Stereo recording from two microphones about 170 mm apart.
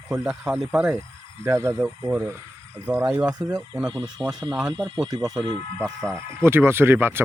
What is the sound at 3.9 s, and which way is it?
Speech, 25° right (ahead or behind).